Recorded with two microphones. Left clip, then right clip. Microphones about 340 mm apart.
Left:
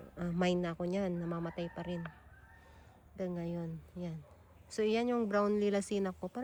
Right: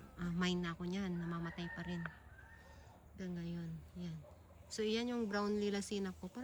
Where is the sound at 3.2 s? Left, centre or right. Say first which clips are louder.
Left 9 dB; centre.